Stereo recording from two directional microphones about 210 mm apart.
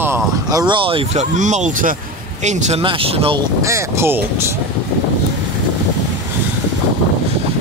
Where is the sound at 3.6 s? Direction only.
15° right (ahead or behind).